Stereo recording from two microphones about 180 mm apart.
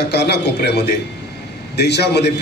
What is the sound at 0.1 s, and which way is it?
A man's voice, 65° left (ahead or behind).